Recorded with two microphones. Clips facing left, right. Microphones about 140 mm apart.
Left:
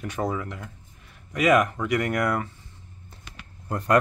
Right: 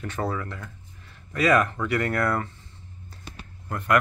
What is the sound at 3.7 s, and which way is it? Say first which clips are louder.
Speech: left 1 dB; 35° left (ahead or behind).